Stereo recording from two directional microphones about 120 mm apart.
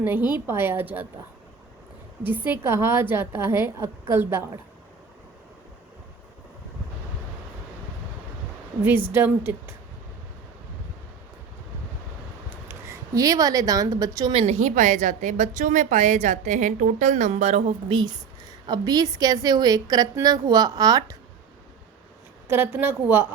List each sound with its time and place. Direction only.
0.0 s a woman's voice: 15° right (ahead or behind)
2.2 s a woman's voice: 15° right (ahead or behind)
9.1 s a woman's voice: 15° right (ahead or behind)
12.6 s a woman's voice: 25° right (ahead or behind)
14.3 s a woman's voice: 70° right (ahead or behind)
17.8 s a woman's voice: 40° right (ahead or behind)
22.4 s a woman's voice: 15° right (ahead or behind)